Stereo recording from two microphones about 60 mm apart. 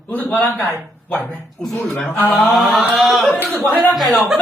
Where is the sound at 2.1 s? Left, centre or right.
Left.